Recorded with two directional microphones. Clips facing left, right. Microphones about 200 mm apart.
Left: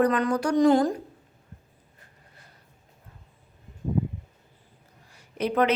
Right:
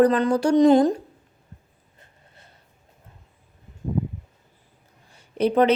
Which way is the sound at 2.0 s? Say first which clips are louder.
Right 3 dB; 25° right (ahead or behind).